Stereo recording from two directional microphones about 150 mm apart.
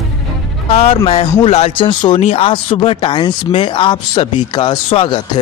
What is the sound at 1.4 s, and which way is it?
Speech, 40° left (ahead or behind).